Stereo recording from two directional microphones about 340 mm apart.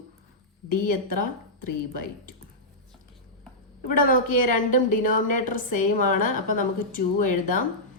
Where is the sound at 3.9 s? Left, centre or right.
Left.